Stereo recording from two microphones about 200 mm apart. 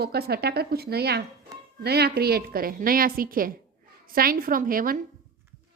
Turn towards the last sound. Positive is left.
turn(degrees=-45)  # may be behind; listen again after turning